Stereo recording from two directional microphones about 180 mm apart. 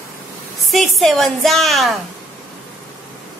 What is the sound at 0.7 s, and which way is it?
A woman's voice, centre (ahead or behind).